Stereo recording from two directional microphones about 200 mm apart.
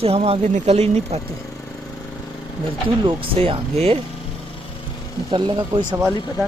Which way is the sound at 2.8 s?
25° right (ahead or behind).